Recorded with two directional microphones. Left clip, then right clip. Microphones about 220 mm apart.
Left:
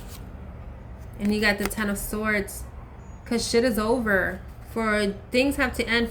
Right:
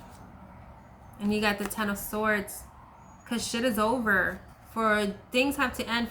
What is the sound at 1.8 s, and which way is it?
A woman's voice, 10° right (ahead or behind).